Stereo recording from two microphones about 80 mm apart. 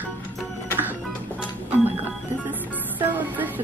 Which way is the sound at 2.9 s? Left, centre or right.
Right.